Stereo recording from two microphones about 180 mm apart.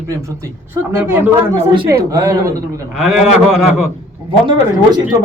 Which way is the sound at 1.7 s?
25° right (ahead or behind).